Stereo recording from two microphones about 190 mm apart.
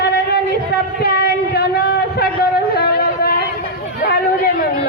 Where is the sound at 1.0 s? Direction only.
55° left (ahead or behind).